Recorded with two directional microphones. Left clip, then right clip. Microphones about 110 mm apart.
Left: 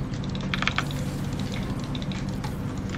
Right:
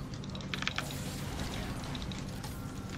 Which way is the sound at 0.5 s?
25° right (ahead or behind).